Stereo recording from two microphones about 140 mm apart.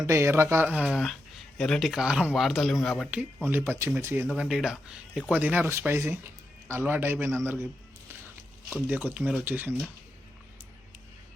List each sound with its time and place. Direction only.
0.0 s speech: 20° right (ahead or behind)
0.9 s speech: centre (ahead or behind); by 4.3 s 15° right (ahead or behind)
4.4 s speech: 5° right (ahead or behind)
8.7 s speech: 10° right (ahead or behind)